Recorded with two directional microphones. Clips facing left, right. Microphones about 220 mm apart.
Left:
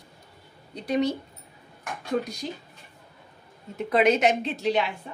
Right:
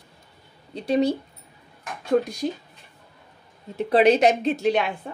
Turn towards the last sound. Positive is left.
turn(degrees=-50)  # may be behind; listen again after turning